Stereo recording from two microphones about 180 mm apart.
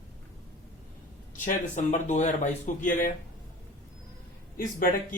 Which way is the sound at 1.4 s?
40° left (ahead or behind).